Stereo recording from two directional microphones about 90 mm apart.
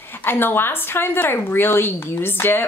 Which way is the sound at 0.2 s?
25° left (ahead or behind).